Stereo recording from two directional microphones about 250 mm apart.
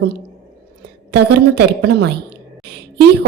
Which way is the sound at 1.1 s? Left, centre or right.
Right.